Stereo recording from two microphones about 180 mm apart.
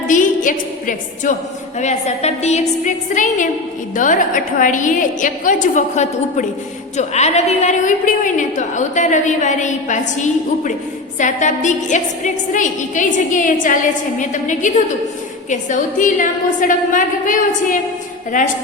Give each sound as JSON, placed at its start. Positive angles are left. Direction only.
{"t": 0.1, "sound": "music", "side_deg": 45}
{"t": 1.8, "sound": "a woman's voice", "side_deg": 40}